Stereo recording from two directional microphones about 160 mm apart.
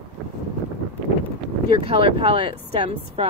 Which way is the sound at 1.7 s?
35° right (ahead or behind).